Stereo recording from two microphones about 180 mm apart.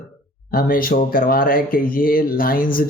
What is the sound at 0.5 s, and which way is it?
Speech, 50° left (ahead or behind).